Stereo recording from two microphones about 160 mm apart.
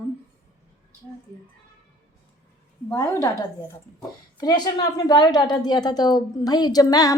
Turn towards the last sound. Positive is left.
turn(degrees=25)  # may be behind; listen again after turning